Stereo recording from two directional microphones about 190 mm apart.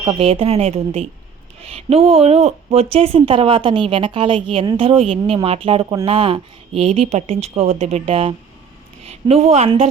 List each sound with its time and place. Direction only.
0.0 s speech: 25° right (ahead or behind)
5.8 s speech: 15° right (ahead or behind)
6.1 s a woman's voice: 30° right (ahead or behind)